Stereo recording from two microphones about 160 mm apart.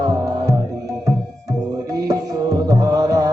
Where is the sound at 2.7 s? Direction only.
20° right (ahead or behind).